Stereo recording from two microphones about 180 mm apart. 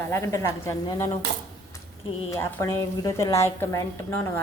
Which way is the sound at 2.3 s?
15° left (ahead or behind).